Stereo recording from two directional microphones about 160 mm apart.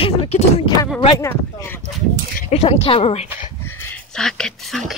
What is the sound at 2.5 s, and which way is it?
Speech, 40° left (ahead or behind).